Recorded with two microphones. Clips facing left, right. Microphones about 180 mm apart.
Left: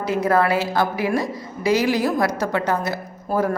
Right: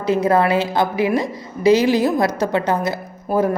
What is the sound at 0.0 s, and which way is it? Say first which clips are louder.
A woman's voice: right 3 dB; 20° right (ahead or behind).